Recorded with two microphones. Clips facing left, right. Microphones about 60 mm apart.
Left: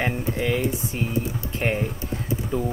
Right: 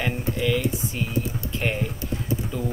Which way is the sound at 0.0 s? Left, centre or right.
Left.